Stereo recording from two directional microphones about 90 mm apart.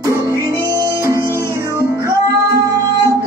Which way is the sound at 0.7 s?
35° right (ahead or behind).